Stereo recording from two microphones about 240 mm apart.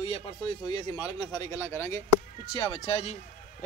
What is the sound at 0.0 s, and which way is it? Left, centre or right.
Speech, left.